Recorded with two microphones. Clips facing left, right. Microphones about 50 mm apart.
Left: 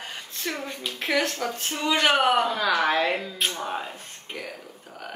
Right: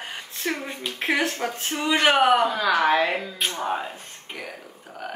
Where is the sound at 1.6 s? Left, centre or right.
Centre.